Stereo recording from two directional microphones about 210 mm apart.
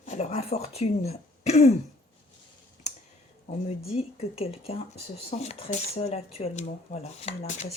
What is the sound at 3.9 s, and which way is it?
Speech, 30° left (ahead or behind).